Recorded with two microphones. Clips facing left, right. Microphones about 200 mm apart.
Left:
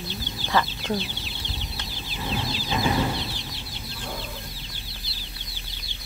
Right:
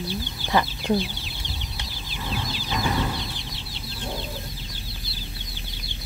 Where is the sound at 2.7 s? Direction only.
15° left (ahead or behind).